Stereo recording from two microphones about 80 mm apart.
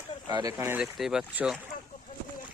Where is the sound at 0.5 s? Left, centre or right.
Right.